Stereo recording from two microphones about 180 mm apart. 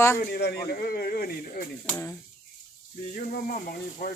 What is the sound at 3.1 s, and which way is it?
Speech, 50° left (ahead or behind).